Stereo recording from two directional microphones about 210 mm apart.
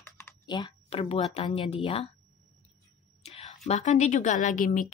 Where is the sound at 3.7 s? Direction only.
35° left (ahead or behind).